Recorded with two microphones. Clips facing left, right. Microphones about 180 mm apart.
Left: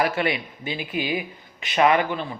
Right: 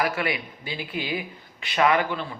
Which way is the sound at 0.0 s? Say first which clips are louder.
Left 3 dB; 25° left (ahead or behind).